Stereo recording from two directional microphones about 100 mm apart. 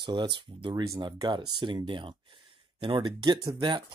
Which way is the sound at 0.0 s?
55° right (ahead or behind).